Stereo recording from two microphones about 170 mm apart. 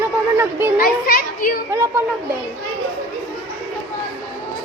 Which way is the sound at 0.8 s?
60° left (ahead or behind).